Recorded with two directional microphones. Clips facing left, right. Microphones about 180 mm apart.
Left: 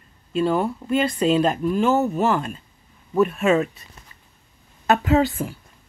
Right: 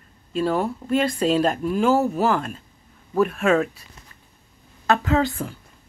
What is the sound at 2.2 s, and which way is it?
Speech, 5° left (ahead or behind).